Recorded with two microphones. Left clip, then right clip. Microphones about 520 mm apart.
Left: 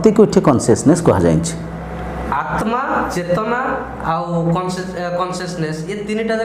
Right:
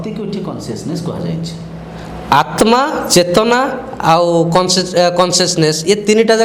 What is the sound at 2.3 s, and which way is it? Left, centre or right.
Speech, right.